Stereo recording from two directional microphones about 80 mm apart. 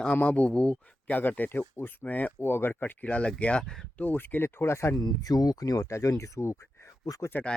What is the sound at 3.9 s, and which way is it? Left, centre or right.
Speech, left.